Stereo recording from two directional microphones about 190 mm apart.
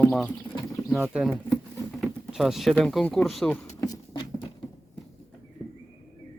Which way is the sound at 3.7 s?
20° left (ahead or behind).